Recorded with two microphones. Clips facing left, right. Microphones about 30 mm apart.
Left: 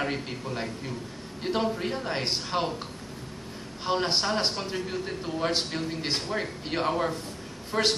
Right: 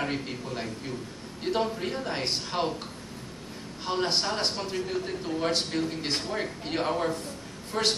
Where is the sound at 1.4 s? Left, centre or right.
Centre.